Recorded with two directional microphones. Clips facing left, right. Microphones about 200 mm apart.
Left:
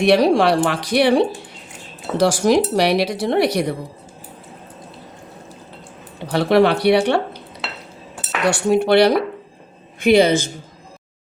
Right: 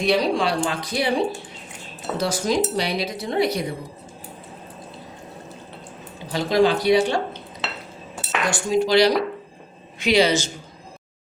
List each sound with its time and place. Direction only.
0.0 s speech: 70° left (ahead or behind)
6.1 s speech: 65° left (ahead or behind)
8.4 s speech: 65° left (ahead or behind)